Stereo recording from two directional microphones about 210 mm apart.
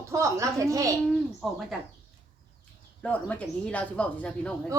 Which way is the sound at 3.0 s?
5° left (ahead or behind).